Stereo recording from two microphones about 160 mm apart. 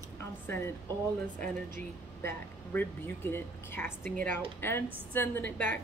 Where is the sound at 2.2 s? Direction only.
15° left (ahead or behind).